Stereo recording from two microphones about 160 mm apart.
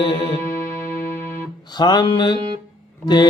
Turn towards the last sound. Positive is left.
turn(degrees=25)  # may be behind; listen again after turning